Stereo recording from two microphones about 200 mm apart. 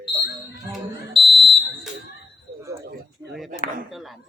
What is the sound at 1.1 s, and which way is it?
Fire alarm, 25° right (ahead or behind).